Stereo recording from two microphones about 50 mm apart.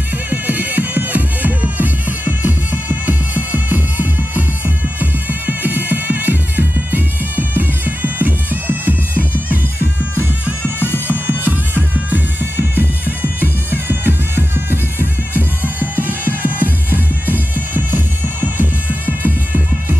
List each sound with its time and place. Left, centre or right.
0.3 s music: right
11.1 s music: right